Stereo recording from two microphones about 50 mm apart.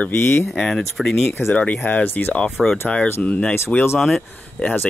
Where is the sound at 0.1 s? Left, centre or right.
Left.